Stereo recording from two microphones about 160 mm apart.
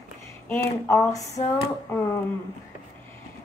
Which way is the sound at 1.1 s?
20° left (ahead or behind).